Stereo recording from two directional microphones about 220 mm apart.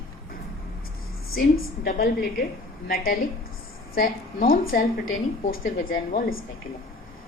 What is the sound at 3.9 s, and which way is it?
A woman's voice, 40° left (ahead or behind).